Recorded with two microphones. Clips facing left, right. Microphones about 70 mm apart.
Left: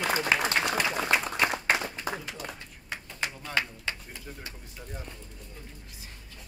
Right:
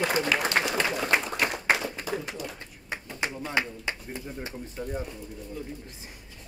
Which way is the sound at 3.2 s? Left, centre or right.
Right.